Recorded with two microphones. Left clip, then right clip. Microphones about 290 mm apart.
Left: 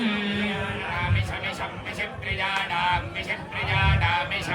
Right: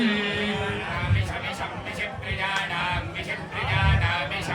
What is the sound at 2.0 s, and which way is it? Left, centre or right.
Sheep, centre.